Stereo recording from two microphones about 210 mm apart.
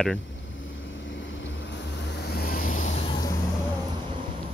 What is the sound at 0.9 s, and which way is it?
Vehicle, 60° left (ahead or behind).